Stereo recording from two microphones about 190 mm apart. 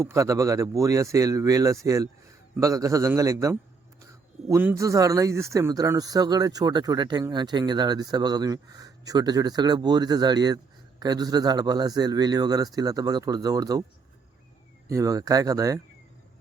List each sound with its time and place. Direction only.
0.0 s speech: 15° right (ahead or behind)
14.8 s speech: 15° right (ahead or behind)